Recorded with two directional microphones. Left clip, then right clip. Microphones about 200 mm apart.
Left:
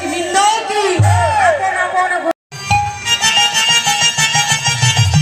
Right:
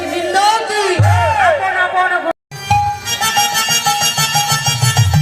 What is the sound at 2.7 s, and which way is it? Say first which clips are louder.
Music: even; 35° right (ahead or behind).